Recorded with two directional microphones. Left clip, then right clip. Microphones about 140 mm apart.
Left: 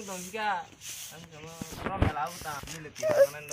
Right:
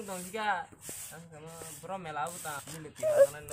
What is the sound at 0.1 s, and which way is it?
Speech, 20° left (ahead or behind).